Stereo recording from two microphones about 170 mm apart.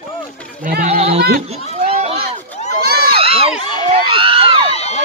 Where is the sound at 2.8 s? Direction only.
65° right (ahead or behind).